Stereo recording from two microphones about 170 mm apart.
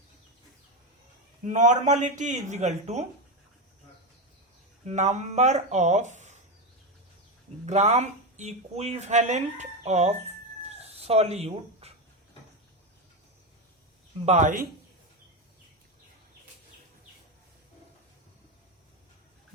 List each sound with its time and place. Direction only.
1.5 s speech: 45° right (ahead or behind)
4.9 s speech: 40° right (ahead or behind)
7.6 s speech: 40° right (ahead or behind)
10.6 s cat: 35° right (ahead or behind)
14.3 s speech: 45° right (ahead or behind)